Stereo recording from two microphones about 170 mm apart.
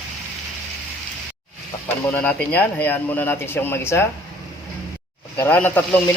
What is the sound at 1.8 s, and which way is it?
Speech, 10° left (ahead or behind).